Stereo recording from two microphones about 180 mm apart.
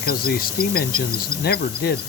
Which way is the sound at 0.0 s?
55° left (ahead or behind).